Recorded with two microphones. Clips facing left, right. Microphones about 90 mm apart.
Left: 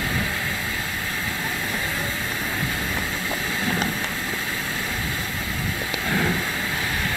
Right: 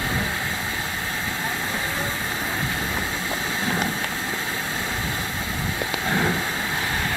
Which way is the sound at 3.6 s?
20° right (ahead or behind).